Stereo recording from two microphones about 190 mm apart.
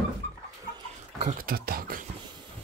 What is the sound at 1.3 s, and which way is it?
Speech, 50° right (ahead or behind).